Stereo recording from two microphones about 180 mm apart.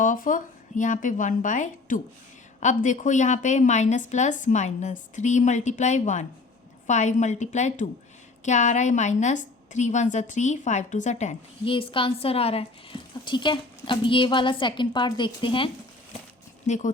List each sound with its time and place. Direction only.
0.0 s a woman's voice: 45° left (ahead or behind)
11.7 s a woman's voice: 30° left (ahead or behind)
16.6 s speech: 40° left (ahead or behind)